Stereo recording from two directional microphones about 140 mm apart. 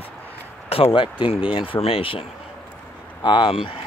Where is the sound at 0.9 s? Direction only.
35° left (ahead or behind).